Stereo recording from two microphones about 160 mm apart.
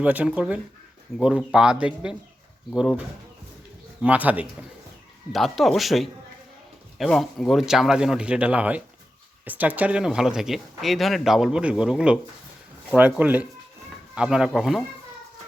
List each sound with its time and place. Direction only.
0.0 s speech: 10° right (ahead or behind)
4.0 s speech: 10° right (ahead or behind)
5.3 s speech: centre (ahead or behind)